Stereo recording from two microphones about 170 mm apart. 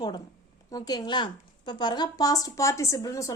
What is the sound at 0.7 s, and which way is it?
A woman's voice, 25° left (ahead or behind).